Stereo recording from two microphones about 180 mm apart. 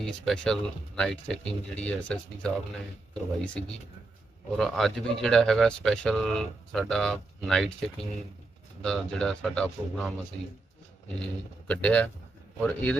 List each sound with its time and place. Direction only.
0.0 s speech: 5° left (ahead or behind)
4.5 s speech: centre (ahead or behind)
11.7 s speech: 10° left (ahead or behind)